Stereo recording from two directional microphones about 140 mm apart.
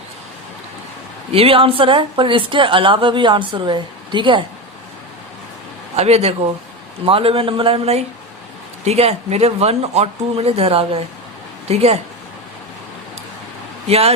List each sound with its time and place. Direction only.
1.3 s speech: 40° right (ahead or behind)
6.0 s speech: 50° right (ahead or behind)
13.8 s speech: 45° right (ahead or behind)